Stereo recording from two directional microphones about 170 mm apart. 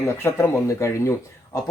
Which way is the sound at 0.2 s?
15° left (ahead or behind).